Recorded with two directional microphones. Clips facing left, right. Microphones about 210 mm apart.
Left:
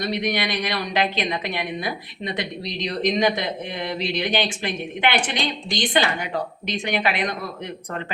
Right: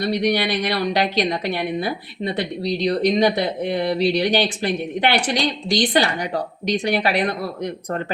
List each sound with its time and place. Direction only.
0.1 s a woman's voice: 35° right (ahead or behind)